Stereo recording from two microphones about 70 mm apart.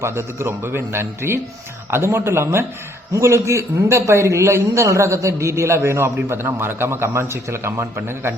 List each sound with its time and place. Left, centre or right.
0.0 s a man's voice: right